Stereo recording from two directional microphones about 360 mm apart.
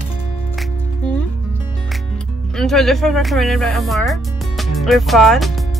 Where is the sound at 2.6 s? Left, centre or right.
Centre.